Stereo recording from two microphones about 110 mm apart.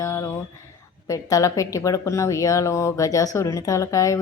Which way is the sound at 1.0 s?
30° left (ahead or behind).